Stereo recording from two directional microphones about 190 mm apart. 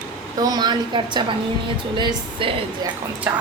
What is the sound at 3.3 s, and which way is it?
Speech, 10° right (ahead or behind).